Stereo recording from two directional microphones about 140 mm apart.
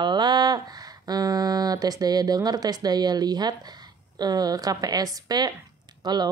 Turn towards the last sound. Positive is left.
turn(degrees=-30)  # may be behind; listen again after turning